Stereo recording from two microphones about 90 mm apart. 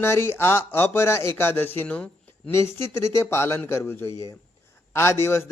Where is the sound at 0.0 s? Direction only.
30° left (ahead or behind).